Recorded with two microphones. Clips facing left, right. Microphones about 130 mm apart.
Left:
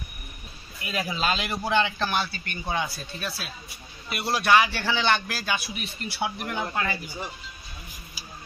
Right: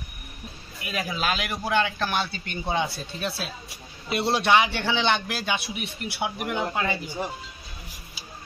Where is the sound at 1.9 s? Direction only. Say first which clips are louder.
Even; 15° left (ahead or behind).